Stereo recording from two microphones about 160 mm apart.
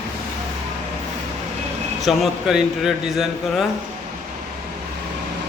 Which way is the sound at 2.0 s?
Centre (ahead or behind).